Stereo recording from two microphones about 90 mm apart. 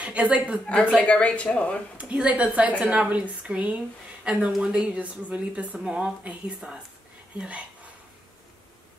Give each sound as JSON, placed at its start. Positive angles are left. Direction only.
{"t": 0.0, "sound": "a woman's voice", "side_deg": -15}
{"t": 0.7, "sound": "a woman's voice", "side_deg": 15}
{"t": 2.0, "sound": "speech", "side_deg": -15}